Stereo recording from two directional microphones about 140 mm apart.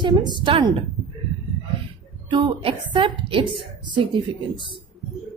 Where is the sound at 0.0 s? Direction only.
30° right (ahead or behind).